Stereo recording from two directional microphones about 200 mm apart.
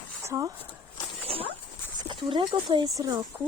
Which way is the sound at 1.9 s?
25° right (ahead or behind).